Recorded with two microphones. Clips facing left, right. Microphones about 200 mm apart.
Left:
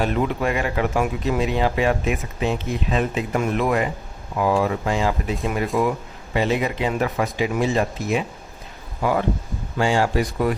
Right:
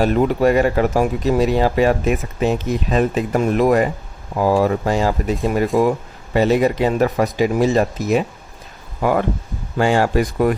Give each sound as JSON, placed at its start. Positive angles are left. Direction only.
{"t": 0.0, "sound": "speech", "side_deg": -40}
{"t": 9.0, "sound": "speech", "side_deg": -50}